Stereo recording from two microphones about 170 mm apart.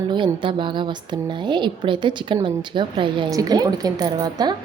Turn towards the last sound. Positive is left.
turn(degrees=-25)  # may be behind; listen again after turning